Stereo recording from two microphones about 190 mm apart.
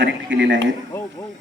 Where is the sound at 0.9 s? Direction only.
15° left (ahead or behind).